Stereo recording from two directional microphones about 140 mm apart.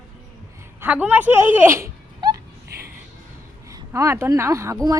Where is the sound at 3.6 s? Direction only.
20° right (ahead or behind).